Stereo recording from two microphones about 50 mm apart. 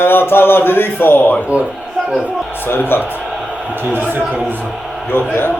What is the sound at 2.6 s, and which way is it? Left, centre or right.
Speech, left.